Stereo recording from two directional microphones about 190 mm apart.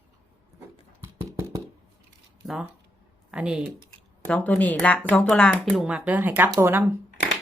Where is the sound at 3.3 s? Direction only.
5° right (ahead or behind).